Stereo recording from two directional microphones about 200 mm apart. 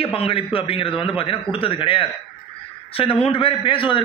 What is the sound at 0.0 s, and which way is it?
A man's voice, 30° left (ahead or behind).